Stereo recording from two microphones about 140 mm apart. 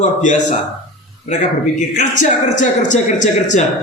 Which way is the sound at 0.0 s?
60° left (ahead or behind).